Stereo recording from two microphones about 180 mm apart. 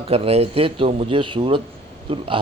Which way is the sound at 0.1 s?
35° right (ahead or behind).